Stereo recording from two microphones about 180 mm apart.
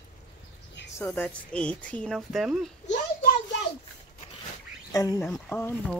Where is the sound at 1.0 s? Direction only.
10° left (ahead or behind).